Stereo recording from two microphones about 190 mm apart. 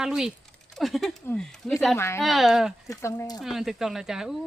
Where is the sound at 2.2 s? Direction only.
Centre (ahead or behind).